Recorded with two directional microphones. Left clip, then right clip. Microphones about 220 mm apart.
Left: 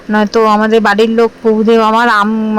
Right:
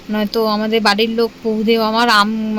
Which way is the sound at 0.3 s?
20° left (ahead or behind).